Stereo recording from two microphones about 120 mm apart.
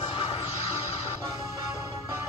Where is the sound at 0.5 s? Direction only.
55° left (ahead or behind).